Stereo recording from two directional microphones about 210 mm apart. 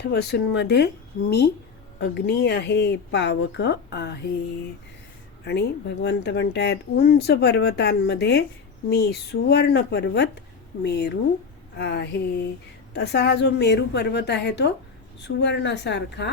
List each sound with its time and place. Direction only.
0.0 s speech: 50° left (ahead or behind)
5.5 s a woman's voice: 50° left (ahead or behind)